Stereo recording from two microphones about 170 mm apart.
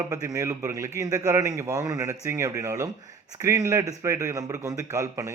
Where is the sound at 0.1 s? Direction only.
20° right (ahead or behind).